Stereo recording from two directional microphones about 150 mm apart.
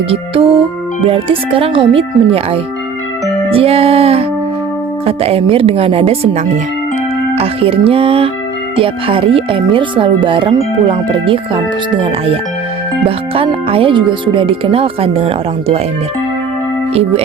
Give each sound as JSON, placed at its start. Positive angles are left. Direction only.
{"t": 0.1, "sound": "speech", "side_deg": -40}
{"t": 13.1, "sound": "speech", "side_deg": -35}
{"t": 16.9, "sound": "music", "side_deg": -40}